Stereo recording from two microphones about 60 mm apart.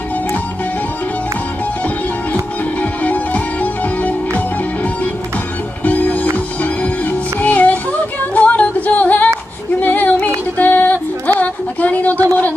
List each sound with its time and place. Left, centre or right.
2.8 s music: left
5.9 s music: left
9.8 s female singing: left
10.6 s music: left
11.3 s a sound: left